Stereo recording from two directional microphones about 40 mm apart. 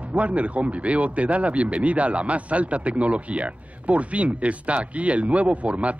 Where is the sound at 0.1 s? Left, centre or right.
Right.